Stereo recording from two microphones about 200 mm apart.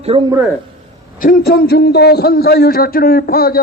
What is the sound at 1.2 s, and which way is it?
A man's voice, 45° left (ahead or behind).